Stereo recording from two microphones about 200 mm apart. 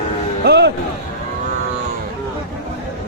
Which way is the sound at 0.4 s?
55° right (ahead or behind).